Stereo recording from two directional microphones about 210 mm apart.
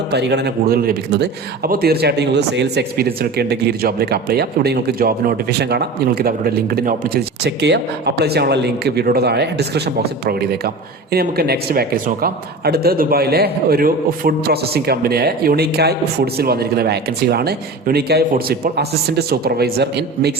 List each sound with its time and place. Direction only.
0.1 s a man's voice: 55° right (ahead or behind)